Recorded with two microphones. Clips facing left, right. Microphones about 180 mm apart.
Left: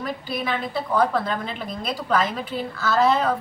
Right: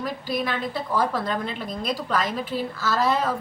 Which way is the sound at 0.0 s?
Centre (ahead or behind).